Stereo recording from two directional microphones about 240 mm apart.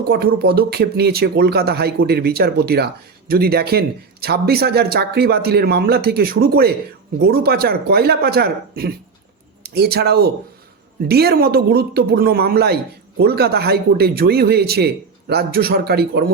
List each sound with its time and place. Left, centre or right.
0.1 s speech: right